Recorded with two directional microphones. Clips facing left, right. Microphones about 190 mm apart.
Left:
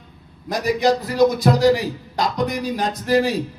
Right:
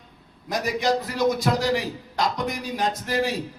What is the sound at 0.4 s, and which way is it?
A man's voice, 35° left (ahead or behind).